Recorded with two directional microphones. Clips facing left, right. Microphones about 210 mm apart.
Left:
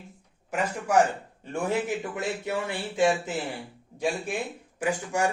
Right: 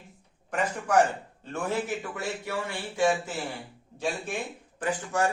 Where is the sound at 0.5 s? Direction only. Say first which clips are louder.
Left 1 dB; 5° left (ahead or behind).